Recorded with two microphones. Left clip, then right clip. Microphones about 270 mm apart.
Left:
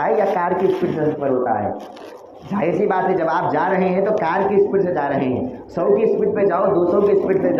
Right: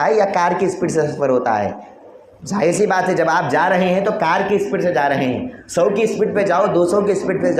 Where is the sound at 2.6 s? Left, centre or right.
Right.